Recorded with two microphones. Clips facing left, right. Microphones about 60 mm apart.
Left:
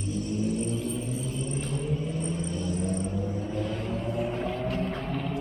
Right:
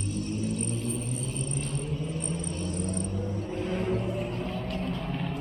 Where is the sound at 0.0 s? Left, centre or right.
Right.